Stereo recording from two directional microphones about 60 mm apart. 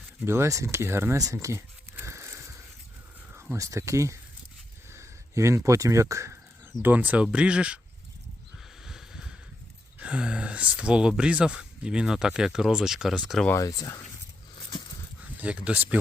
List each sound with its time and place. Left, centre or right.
0.3 s speech: right
1.2 s speech: right
2.0 s a sound: right
3.6 s speech: right
6.8 s speech: right
8.8 s a sound: centre
10.0 s speech: centre
13.6 s speech: left
15.4 s speech: right